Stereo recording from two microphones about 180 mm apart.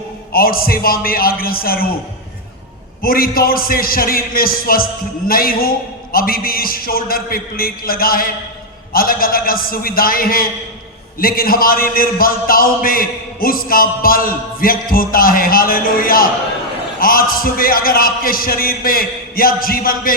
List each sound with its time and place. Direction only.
0.3 s a man's voice: 55° left (ahead or behind)
3.0 s a man's voice: 55° left (ahead or behind)